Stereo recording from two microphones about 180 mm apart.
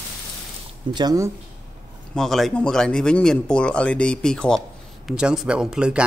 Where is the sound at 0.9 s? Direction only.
20° right (ahead or behind).